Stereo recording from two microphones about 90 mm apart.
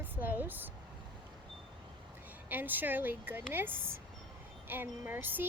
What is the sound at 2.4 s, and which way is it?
Speech, 20° right (ahead or behind).